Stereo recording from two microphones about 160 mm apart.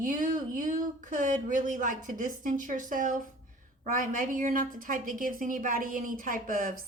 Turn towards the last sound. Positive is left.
turn(degrees=-60)  # may be behind; listen again after turning